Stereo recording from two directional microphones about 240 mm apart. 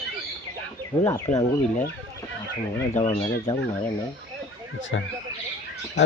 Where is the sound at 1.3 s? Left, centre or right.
Left.